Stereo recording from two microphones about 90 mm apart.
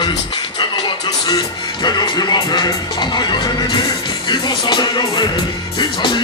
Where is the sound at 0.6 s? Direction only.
55° left (ahead or behind).